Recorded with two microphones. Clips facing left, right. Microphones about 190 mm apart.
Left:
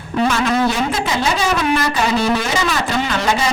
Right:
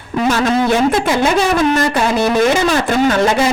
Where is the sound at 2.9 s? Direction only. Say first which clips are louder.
Right 5 dB; 50° right (ahead or behind).